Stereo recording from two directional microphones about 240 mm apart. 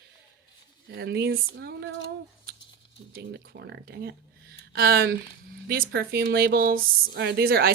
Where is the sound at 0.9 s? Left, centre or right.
Right.